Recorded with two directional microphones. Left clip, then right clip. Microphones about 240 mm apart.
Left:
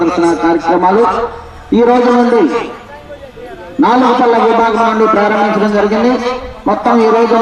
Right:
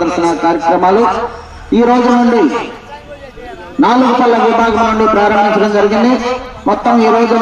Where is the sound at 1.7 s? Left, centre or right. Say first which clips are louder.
Left 1 dB; right.